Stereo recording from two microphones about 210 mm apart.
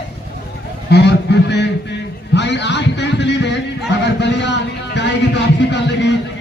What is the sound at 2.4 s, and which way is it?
Music, 55° left (ahead or behind).